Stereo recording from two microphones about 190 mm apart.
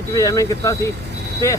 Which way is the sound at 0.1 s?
15° left (ahead or behind).